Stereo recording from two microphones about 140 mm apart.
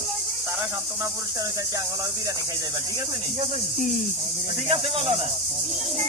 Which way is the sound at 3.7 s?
70° left (ahead or behind).